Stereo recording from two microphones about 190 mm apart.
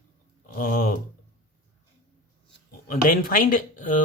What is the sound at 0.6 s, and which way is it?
Speech, 50° left (ahead or behind).